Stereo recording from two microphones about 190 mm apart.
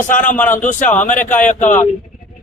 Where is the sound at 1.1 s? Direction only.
10° left (ahead or behind).